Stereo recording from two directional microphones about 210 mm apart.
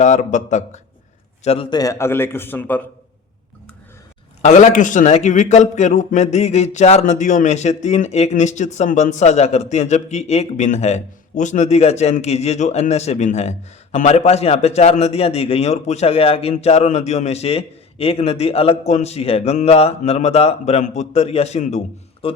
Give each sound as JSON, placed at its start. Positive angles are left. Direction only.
{"t": 0.0, "sound": "a man's voice", "side_deg": 35}
{"t": 1.5, "sound": "a man's voice", "side_deg": 25}
{"t": 4.4, "sound": "a man's voice", "side_deg": 35}